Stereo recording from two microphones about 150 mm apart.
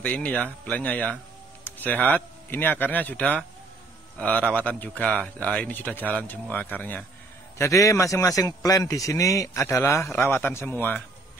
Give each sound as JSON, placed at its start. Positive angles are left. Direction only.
{"t": 0.0, "sound": "a man's voice", "side_deg": 10}